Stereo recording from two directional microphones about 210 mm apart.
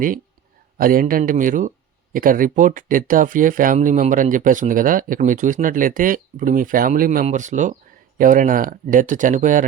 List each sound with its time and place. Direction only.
0.8 s speech: 40° right (ahead or behind)